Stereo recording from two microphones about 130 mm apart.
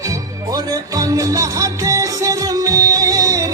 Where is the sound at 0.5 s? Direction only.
30° right (ahead or behind).